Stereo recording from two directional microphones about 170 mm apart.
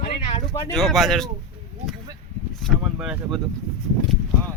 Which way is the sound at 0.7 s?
Centre (ahead or behind).